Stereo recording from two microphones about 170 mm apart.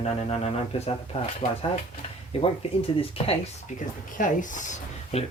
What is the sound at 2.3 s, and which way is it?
Speech, 35° left (ahead or behind).